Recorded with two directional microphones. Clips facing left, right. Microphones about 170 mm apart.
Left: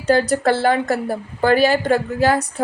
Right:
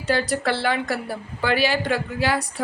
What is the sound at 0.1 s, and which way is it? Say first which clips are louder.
Speech: left 6 dB; 45° left (ahead or behind).